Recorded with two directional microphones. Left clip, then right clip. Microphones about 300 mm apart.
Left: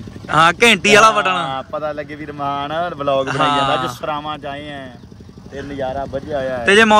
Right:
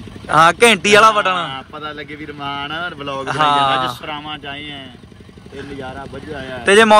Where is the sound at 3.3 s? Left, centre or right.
Centre.